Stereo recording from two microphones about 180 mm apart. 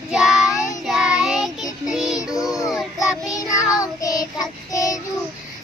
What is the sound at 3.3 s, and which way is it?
Child singing, 20° left (ahead or behind).